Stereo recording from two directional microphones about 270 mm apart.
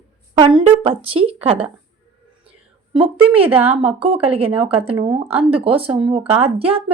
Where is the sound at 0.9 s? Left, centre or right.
Right.